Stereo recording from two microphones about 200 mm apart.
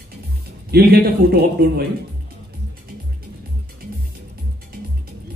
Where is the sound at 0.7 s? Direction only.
50° right (ahead or behind).